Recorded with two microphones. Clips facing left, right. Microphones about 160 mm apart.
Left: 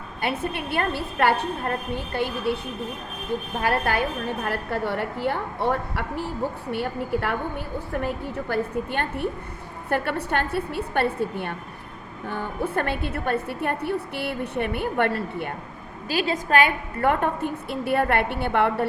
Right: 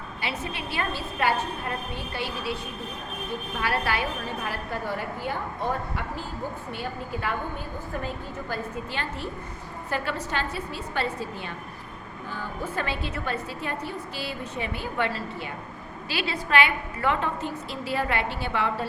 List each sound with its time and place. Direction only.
0.2 s a woman's voice: 55° left (ahead or behind)
3.6 s speech: 50° left (ahead or behind)
4.4 s a woman's voice: 60° left (ahead or behind)
16.0 s a woman's voice: 45° left (ahead or behind)